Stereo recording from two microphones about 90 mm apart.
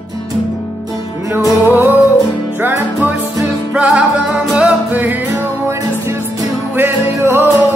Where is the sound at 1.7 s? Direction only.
25° right (ahead or behind).